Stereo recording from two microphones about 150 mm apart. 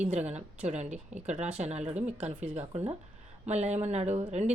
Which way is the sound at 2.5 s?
45° right (ahead or behind).